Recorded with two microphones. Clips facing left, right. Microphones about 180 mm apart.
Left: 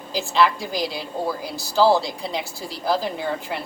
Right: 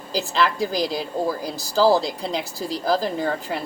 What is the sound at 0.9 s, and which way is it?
Speech, 40° right (ahead or behind).